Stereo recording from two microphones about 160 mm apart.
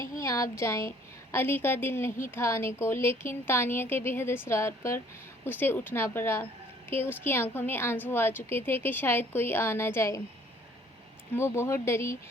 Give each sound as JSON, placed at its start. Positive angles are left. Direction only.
{"t": 0.2, "sound": "a woman's voice", "side_deg": 20}
{"t": 11.3, "sound": "a woman's voice", "side_deg": 15}